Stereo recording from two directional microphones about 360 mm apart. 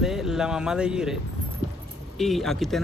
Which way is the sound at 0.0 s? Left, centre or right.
Centre.